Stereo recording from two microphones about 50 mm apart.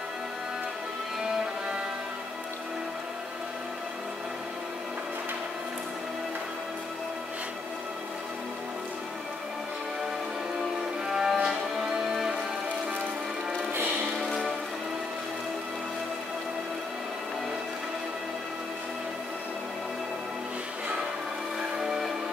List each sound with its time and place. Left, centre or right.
1.2 s music: centre
11.1 s music: centre
21.7 s a sound: centre